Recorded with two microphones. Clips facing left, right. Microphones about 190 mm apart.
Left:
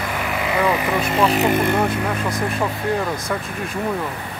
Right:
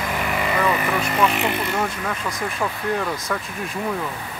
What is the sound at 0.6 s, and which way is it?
Speech, 15° left (ahead or behind).